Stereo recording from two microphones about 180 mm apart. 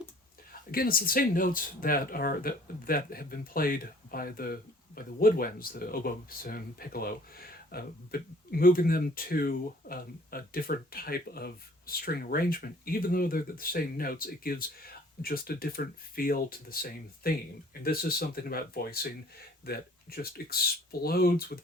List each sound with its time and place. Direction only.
0.7 s speech: 55° left (ahead or behind)